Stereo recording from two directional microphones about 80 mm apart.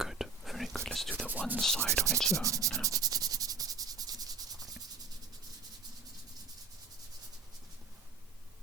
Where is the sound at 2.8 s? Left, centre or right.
Right.